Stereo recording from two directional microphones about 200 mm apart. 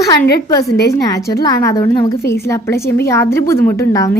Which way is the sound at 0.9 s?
15° left (ahead or behind).